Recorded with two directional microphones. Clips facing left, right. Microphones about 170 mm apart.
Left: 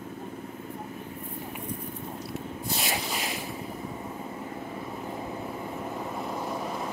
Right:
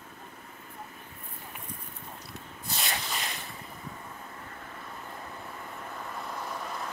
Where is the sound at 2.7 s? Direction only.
Centre (ahead or behind).